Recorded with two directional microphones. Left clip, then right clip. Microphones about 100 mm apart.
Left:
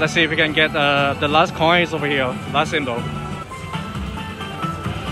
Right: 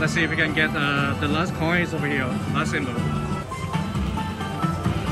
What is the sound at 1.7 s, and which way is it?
Speech, 25° left (ahead or behind).